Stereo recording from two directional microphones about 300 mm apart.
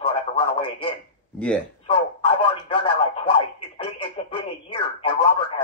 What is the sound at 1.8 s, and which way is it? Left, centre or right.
Speech, centre.